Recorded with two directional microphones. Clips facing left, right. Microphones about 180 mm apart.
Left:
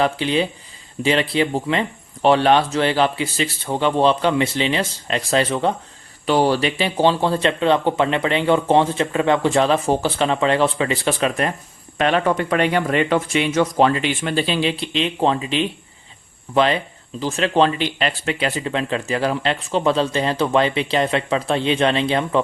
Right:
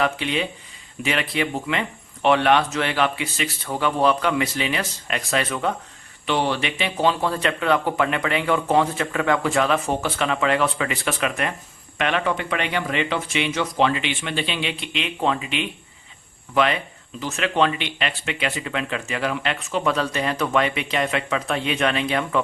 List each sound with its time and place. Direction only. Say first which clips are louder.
0.0 s speech: left 4 dB; 30° left (ahead or behind)